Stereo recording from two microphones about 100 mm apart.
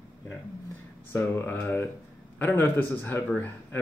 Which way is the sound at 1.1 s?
25° left (ahead or behind).